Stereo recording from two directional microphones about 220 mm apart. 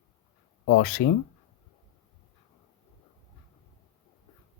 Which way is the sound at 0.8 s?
45° left (ahead or behind).